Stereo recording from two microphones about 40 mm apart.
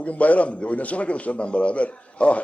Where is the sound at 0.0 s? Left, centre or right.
Left.